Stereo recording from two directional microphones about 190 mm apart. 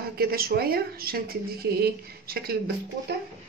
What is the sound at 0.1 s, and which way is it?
Speech, 50° right (ahead or behind).